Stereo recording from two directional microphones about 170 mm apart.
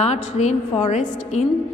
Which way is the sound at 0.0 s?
40° left (ahead or behind).